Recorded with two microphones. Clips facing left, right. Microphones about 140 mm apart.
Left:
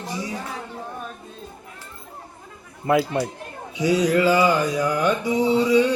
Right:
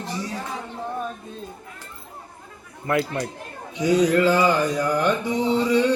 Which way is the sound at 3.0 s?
10° left (ahead or behind).